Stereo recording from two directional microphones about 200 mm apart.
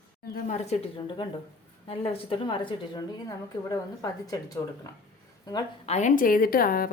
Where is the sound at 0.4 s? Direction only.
35° left (ahead or behind); by 4.9 s 15° left (ahead or behind).